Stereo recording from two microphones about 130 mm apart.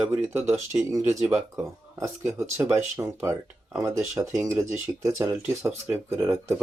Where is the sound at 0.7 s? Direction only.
25° right (ahead or behind).